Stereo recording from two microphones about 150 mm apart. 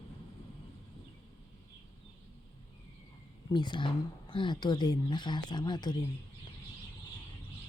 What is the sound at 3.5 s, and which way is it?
Speech, 30° left (ahead or behind).